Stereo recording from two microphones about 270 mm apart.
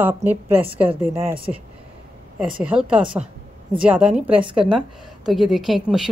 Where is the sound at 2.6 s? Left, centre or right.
Centre.